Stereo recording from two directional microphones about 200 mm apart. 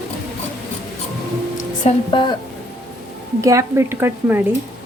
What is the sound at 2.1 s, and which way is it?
Speech, 25° left (ahead or behind).